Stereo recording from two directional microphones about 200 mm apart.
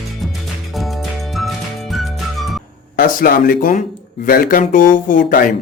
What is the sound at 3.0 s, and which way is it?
Speech, 45° left (ahead or behind).